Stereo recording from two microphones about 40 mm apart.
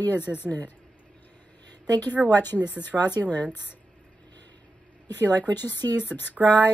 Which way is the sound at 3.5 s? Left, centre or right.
Left.